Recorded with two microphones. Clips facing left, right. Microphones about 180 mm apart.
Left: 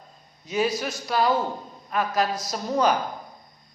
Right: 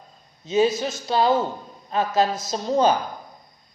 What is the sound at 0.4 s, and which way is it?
A man's voice, 25° right (ahead or behind).